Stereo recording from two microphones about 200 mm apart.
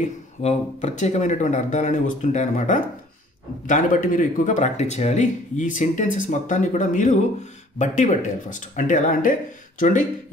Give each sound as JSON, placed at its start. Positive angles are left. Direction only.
{"t": 0.0, "sound": "speech", "side_deg": 35}